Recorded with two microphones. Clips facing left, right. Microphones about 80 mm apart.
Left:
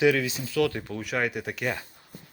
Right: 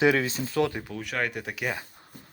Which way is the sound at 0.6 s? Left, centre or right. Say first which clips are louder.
Left 2 dB; centre.